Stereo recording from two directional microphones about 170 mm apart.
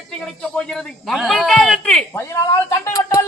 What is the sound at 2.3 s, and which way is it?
Speech, 15° left (ahead or behind).